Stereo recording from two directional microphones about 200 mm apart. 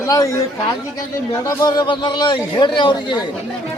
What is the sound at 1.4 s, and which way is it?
Speech, 20° left (ahead or behind).